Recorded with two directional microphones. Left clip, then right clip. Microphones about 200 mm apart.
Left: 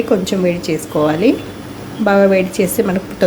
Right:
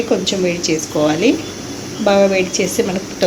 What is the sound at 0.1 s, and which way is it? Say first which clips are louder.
Speech: left 1 dB; 35° left (ahead or behind).